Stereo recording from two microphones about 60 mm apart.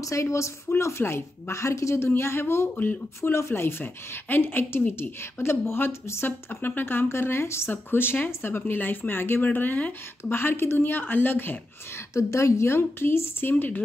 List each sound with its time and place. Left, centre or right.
0.0 s speech: left
2.7 s speech: left
3.2 s speech: left
10.3 s speech: left
12.1 s speech: left